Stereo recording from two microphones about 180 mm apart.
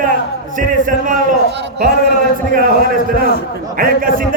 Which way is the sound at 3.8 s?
50° right (ahead or behind).